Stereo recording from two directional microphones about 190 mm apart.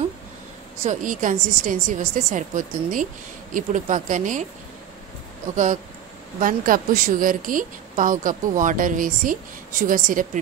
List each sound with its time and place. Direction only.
0.8 s a woman's voice: 45° right (ahead or behind)
6.4 s a woman's voice: 45° right (ahead or behind)